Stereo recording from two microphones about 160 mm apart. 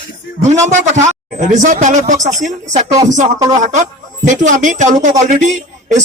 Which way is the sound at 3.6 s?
50° right (ahead or behind).